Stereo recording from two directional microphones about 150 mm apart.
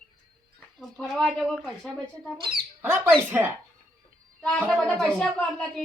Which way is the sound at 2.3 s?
30° right (ahead or behind).